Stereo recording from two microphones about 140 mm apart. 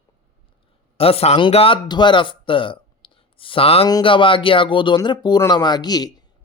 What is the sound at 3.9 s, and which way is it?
A man's voice, 30° left (ahead or behind).